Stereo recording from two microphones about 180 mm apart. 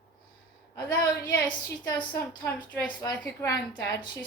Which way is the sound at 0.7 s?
20° left (ahead or behind).